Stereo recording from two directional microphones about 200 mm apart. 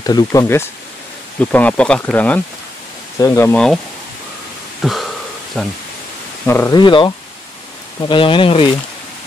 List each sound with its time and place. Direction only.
0.0 s speech: 20° left (ahead or behind)
4.8 s a sound: centre (ahead or behind)
6.4 s speech: 10° left (ahead or behind)
6.8 s speech: 25° left (ahead or behind)